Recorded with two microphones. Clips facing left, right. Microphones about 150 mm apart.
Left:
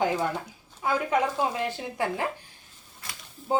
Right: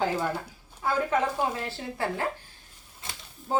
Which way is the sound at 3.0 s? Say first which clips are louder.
Right 1 dB; 20° right (ahead or behind).